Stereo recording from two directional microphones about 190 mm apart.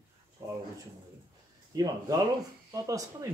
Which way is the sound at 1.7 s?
20° right (ahead or behind).